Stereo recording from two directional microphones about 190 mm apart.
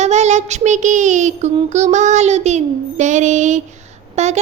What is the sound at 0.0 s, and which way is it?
Speech, 35° right (ahead or behind).